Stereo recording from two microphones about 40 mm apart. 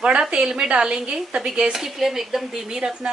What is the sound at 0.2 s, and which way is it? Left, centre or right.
A woman's voice, centre.